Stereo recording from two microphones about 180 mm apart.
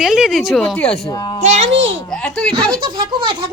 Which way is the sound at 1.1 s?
20° left (ahead or behind).